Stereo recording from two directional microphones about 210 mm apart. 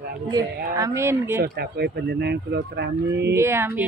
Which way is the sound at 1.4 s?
50° right (ahead or behind).